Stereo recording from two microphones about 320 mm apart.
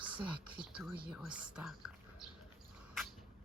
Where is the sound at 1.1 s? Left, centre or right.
Centre.